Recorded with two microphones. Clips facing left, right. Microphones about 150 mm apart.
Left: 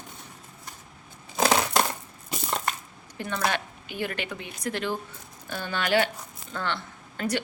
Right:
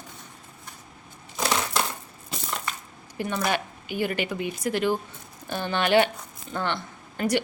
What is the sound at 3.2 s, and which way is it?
Speech, 10° right (ahead or behind).